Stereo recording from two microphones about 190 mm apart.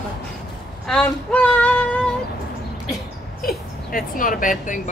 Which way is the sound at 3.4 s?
45° left (ahead or behind).